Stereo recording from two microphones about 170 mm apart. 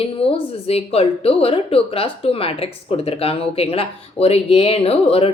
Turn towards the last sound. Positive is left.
turn(degrees=35)  # may be behind; listen again after turning